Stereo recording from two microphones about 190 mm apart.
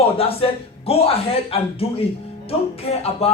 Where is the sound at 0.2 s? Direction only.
30° left (ahead or behind).